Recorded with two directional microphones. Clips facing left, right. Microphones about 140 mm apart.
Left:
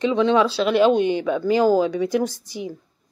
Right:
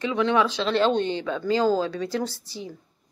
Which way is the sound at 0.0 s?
20° left (ahead or behind).